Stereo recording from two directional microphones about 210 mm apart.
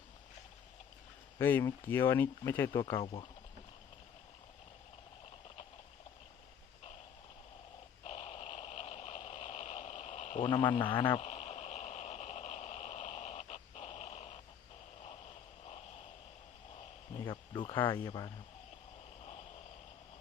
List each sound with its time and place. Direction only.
1.4 s speech: 10° left (ahead or behind)
8.0 s a sound: 30° left (ahead or behind)
10.5 s radio: 25° left (ahead or behind)
17.2 s speech: 20° left (ahead or behind)